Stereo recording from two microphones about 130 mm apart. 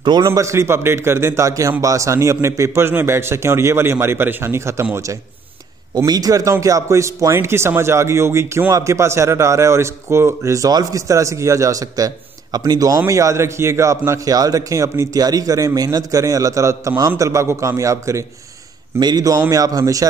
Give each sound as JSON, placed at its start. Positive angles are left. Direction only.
{"t": 0.0, "sound": "a man's voice", "side_deg": -35}
{"t": 0.3, "sound": "speech", "side_deg": -20}
{"t": 6.0, "sound": "a man's voice", "side_deg": -30}